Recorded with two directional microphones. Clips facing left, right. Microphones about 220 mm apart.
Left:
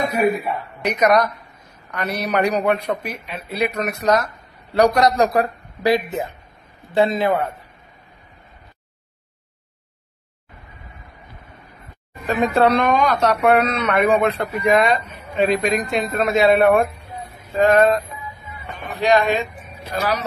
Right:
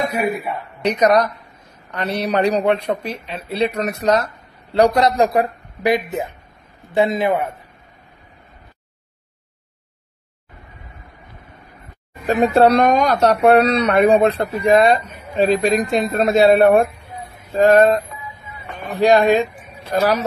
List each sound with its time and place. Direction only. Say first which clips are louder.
0.8 s a man's voice: right 2 dB; 30° right (ahead or behind)
12.3 s speech: right 3 dB; 35° right (ahead or behind)